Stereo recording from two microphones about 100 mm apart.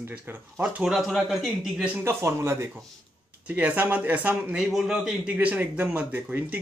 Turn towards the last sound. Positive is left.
turn(degrees=-20)  # may be behind; listen again after turning